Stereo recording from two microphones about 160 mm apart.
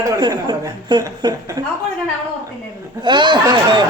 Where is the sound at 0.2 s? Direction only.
25° right (ahead or behind).